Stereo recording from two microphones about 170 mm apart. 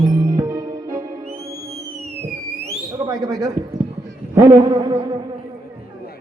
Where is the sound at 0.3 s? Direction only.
20° right (ahead or behind).